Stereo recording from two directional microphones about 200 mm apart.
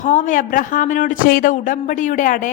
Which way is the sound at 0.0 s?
40° left (ahead or behind).